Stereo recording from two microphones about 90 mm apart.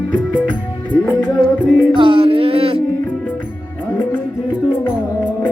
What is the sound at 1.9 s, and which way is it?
Music, 70° right (ahead or behind).